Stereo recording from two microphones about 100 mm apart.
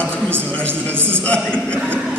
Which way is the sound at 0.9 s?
20° right (ahead or behind).